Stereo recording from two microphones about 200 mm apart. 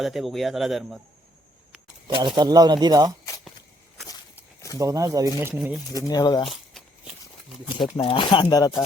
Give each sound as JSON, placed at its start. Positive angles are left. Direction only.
{"t": 0.0, "sound": "a man's voice", "side_deg": 0}
{"t": 2.0, "sound": "speech", "side_deg": -25}
{"t": 4.1, "sound": "a sound", "side_deg": 15}
{"t": 4.8, "sound": "speech", "side_deg": -15}
{"t": 5.9, "sound": "speech", "side_deg": 20}
{"t": 6.5, "sound": "a sound", "side_deg": 0}
{"t": 7.9, "sound": "speech", "side_deg": 25}